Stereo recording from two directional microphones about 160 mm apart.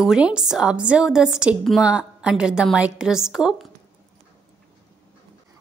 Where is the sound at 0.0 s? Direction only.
5° right (ahead or behind).